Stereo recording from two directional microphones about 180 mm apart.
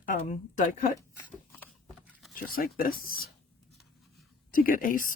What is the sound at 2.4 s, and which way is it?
Speech, 55° left (ahead or behind).